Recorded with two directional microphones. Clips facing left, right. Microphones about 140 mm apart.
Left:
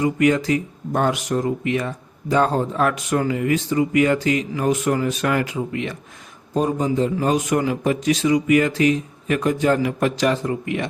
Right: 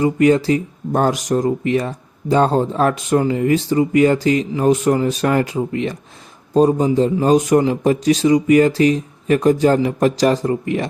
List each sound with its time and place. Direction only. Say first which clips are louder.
0.0 s speech: right 4 dB; 30° right (ahead or behind)